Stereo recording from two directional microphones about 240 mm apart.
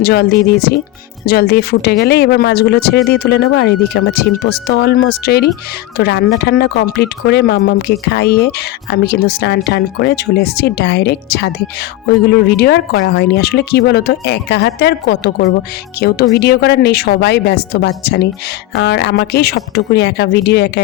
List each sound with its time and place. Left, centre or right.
0.0 s speech: left